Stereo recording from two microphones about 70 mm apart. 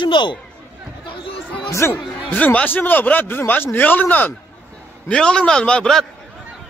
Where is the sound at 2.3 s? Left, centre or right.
Left.